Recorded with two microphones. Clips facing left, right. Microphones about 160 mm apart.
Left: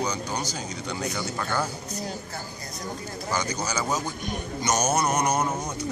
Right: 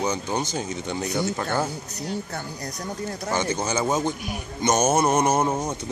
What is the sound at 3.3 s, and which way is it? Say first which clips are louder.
Speech: right 3 dB; 25° right (ahead or behind).